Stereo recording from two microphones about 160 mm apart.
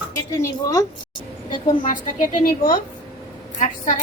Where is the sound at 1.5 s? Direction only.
55° left (ahead or behind).